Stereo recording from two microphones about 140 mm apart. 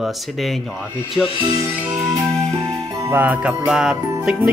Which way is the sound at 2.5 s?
25° right (ahead or behind).